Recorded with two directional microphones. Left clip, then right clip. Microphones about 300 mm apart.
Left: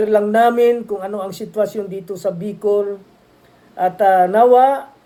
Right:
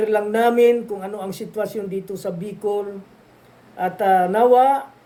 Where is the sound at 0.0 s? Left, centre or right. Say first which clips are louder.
Left 5 dB; centre.